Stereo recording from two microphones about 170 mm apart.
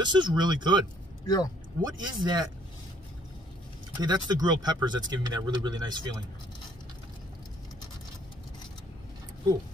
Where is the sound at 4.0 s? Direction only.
25° right (ahead or behind).